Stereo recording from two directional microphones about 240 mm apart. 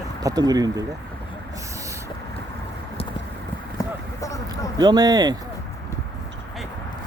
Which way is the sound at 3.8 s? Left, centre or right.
Centre.